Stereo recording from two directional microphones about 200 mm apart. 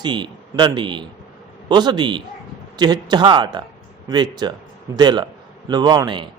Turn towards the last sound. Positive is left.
turn(degrees=-20)  # may be behind; listen again after turning